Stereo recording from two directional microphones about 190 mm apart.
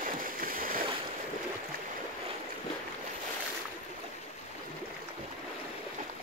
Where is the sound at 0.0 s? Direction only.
45° right (ahead or behind).